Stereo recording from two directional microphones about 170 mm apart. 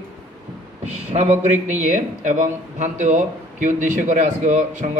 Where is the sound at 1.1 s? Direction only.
40° right (ahead or behind).